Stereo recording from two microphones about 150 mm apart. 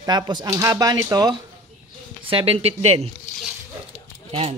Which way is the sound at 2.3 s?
40° right (ahead or behind).